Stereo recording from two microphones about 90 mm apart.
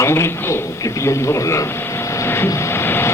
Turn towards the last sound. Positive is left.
turn(degrees=30)  # may be behind; listen again after turning